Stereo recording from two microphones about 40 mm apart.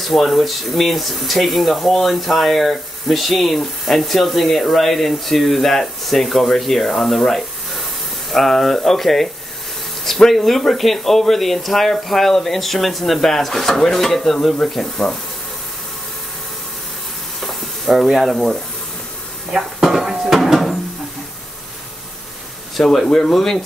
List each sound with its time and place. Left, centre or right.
0.0 s speech: centre
15.0 s speech: centre
17.4 s stir: centre
19.5 s dishes: centre
22.8 s speech: centre